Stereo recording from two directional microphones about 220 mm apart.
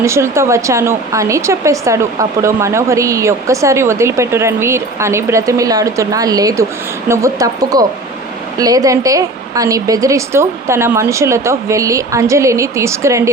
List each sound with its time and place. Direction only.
0.0 s speech: 10° right (ahead or behind)